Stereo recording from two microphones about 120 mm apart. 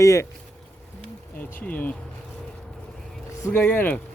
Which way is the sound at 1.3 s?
10° left (ahead or behind).